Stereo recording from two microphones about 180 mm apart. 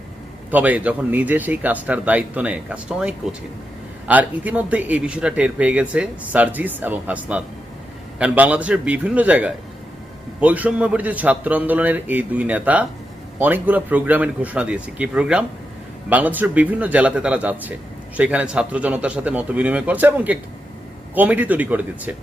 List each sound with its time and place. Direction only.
0.5 s speech: 10° right (ahead or behind)